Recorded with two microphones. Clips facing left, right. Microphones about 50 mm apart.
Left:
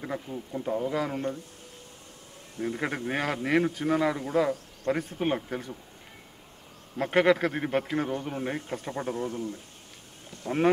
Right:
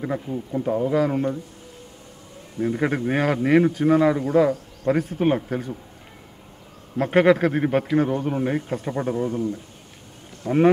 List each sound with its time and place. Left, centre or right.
0.0 s a man's voice: centre
2.5 s a man's voice: centre
7.0 s a man's voice: centre